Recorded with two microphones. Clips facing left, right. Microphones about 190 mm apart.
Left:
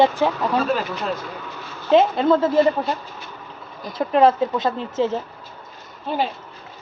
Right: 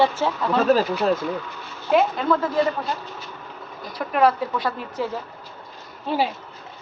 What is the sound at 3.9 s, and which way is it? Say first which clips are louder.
Speech: left 4 dB; 25° left (ahead or behind).